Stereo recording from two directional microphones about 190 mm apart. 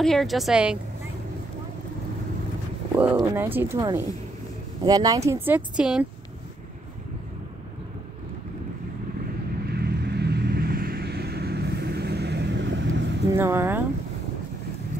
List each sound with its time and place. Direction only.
0.0 s a woman's voice: centre (ahead or behind)
3.0 s speech: 10° right (ahead or behind)
9.7 s vehicle: 60° right (ahead or behind)
13.4 s speech: 15° right (ahead or behind)